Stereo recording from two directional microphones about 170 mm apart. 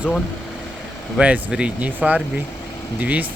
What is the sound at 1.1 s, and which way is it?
Speech, 5° right (ahead or behind).